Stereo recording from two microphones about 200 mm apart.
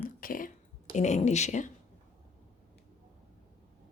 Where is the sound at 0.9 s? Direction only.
35° left (ahead or behind).